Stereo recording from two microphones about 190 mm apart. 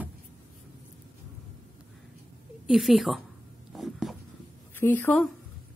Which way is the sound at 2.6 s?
Centre (ahead or behind).